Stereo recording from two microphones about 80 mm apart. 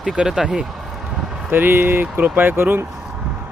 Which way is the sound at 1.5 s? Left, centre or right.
Right.